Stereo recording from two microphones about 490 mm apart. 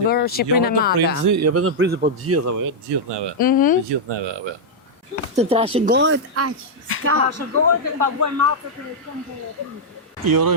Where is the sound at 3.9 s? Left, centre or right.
Right.